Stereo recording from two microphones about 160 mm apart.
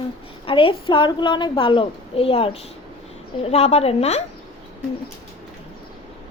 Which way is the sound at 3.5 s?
40° left (ahead or behind).